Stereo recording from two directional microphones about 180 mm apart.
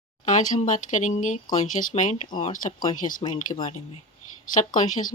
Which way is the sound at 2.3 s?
25° left (ahead or behind).